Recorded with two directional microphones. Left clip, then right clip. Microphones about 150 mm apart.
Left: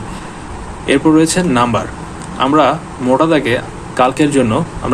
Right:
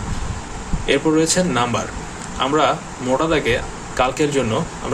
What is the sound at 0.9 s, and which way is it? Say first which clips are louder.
Speech: left 5 dB; 25° left (ahead or behind).